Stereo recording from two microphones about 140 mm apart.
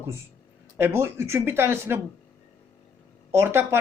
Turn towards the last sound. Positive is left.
turn(degrees=-20)  # may be behind; listen again after turning